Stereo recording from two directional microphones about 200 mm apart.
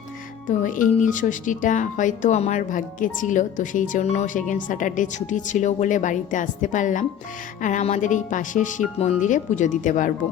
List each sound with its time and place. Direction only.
0.4 s speech: 40° left (ahead or behind)